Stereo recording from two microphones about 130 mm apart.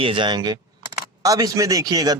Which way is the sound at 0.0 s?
40° right (ahead or behind).